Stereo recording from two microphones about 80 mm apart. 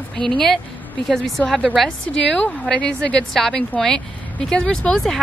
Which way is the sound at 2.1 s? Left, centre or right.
Centre.